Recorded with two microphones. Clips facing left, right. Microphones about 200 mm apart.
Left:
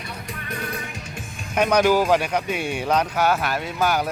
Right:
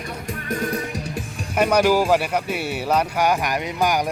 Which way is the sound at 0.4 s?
40° right (ahead or behind).